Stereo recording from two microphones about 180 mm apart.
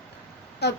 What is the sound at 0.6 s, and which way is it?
Speech, 65° left (ahead or behind).